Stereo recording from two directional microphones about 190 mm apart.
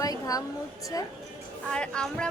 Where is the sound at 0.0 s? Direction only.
20° left (ahead or behind).